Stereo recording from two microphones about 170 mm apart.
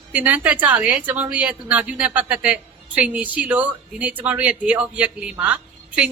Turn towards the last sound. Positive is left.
turn(degrees=-5)  # may be behind; listen again after turning